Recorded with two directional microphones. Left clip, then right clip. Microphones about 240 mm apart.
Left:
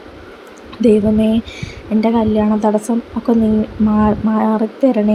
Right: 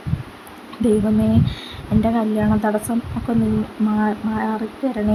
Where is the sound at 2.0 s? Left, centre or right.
Centre.